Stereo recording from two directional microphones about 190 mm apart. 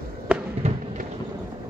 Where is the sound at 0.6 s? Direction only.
35° right (ahead or behind).